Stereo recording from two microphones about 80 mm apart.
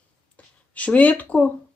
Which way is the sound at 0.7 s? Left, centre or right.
Centre.